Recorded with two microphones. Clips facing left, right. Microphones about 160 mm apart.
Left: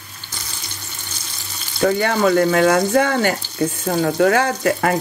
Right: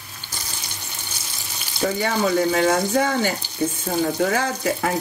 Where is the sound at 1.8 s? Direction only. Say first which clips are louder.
Left 5 dB; 65° left (ahead or behind).